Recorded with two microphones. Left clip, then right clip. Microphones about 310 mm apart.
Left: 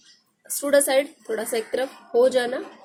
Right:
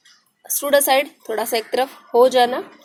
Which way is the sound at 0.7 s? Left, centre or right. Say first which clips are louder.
Right 3 dB; centre.